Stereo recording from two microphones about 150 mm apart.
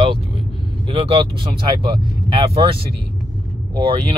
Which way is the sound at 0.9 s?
40° right (ahead or behind).